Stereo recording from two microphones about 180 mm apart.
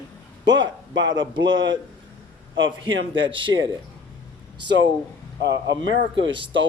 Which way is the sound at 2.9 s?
90° right.